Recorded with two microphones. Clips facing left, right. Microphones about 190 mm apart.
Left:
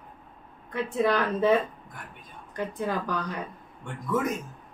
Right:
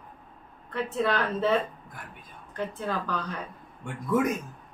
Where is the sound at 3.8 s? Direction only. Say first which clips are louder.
Right 2 dB; 10° right (ahead or behind).